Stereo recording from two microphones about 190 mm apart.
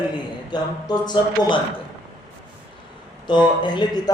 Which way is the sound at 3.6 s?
25° left (ahead or behind).